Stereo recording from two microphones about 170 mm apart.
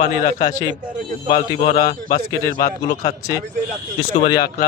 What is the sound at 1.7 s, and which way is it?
A man's voice, 55° left (ahead or behind).